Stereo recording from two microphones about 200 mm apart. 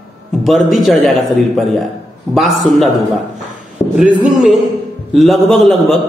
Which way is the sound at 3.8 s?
30° left (ahead or behind).